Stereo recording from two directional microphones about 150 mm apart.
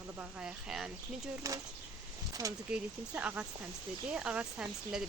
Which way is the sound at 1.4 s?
20° right (ahead or behind).